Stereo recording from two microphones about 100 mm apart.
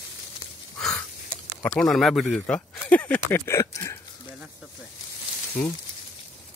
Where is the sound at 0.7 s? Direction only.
10° left (ahead or behind).